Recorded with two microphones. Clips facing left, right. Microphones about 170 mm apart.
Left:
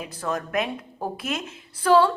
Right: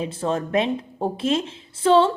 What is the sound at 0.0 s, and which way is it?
A woman's voice, 25° right (ahead or behind).